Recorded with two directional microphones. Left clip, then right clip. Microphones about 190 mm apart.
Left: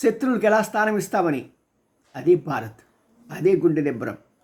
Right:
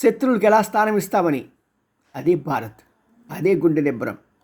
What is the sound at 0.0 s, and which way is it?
Speech, 20° right (ahead or behind).